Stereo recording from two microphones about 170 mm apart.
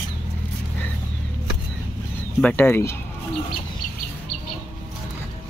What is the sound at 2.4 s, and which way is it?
Speech, 10° left (ahead or behind).